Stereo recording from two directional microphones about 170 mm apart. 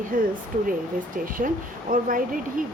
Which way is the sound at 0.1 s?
55° right (ahead or behind).